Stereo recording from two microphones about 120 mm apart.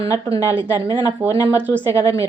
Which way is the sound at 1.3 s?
25° left (ahead or behind).